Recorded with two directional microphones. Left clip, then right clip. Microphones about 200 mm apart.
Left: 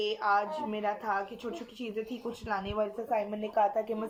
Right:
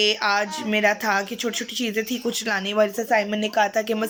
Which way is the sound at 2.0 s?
15° right (ahead or behind).